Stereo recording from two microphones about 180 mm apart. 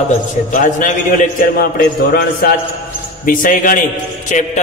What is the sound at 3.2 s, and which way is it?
A man's voice, 50° left (ahead or behind).